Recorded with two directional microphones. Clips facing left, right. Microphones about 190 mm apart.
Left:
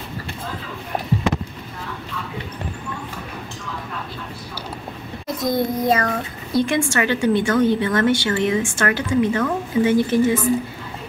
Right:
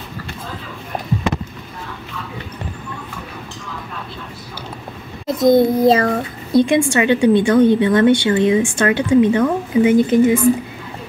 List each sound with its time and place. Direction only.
5.2 s child singing: 25° right (ahead or behind)
6.6 s a woman's voice: 20° right (ahead or behind)